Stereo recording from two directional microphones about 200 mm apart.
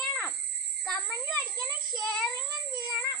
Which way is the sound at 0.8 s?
Centre (ahead or behind).